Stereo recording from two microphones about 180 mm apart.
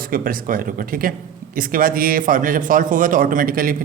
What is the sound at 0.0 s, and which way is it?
A man's voice, 50° right (ahead or behind).